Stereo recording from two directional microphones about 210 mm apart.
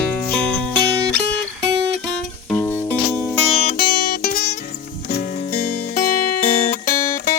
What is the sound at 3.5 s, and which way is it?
Music, 40° left (ahead or behind).